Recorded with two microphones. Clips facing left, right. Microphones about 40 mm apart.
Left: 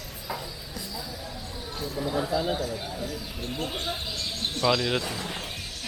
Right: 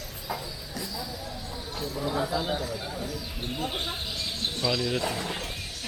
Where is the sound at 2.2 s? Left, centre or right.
Centre.